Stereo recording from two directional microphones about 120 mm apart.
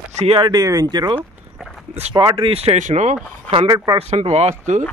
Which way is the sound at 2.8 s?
85° right.